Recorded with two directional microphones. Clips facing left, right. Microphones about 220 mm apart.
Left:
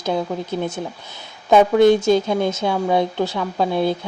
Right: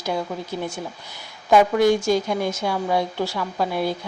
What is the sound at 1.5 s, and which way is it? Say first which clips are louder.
Speech: left 4 dB; 20° left (ahead or behind).